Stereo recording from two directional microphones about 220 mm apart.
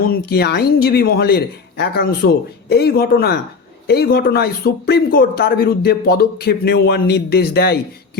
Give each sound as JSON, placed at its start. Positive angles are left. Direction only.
{"t": 0.1, "sound": "a man's voice", "side_deg": 45}